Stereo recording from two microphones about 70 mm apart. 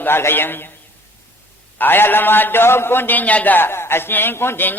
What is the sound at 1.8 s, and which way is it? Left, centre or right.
A man's voice, left.